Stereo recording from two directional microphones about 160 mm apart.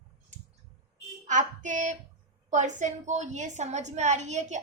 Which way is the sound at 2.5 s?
50° right (ahead or behind).